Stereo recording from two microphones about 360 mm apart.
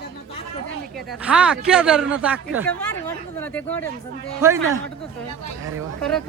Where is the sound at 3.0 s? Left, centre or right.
Centre.